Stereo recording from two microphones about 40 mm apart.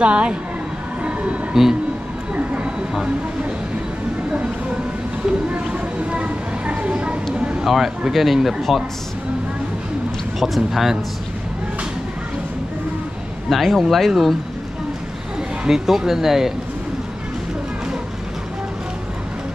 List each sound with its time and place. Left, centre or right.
0.0 s speech: right
1.0 s music: right
1.5 s speech: centre
2.3 s a sound: right
5.7 s a sound: right
7.6 s speech: centre
10.4 s speech: centre
13.5 s speech: centre
15.7 s speech: centre